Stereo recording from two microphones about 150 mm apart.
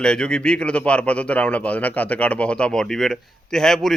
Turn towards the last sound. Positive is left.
turn(degrees=0)  # may be behind; listen again after turning